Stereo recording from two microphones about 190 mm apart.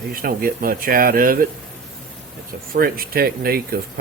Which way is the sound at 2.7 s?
50° right (ahead or behind).